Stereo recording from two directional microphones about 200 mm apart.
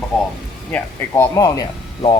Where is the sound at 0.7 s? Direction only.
15° left (ahead or behind).